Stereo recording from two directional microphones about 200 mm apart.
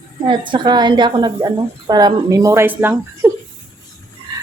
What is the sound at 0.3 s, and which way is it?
A woman's voice, 25° right (ahead or behind).